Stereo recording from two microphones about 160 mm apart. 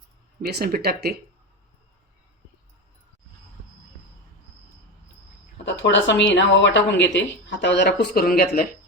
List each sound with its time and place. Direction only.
0.4 s speech: 70° right (ahead or behind)
5.8 s speech: 90° left; by 8.6 s 70° left (ahead or behind)